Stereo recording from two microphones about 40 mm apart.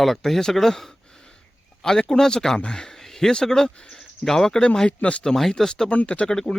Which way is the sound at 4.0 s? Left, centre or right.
Centre.